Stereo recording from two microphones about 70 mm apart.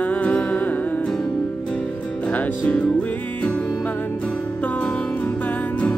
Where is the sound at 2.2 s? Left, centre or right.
Centre.